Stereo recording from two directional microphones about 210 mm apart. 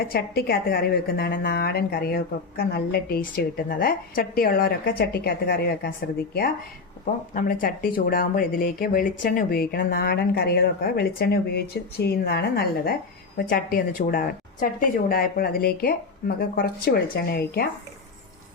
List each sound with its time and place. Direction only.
0.0 s speech: 45° left (ahead or behind)
7.0 s speech: 40° left (ahead or behind)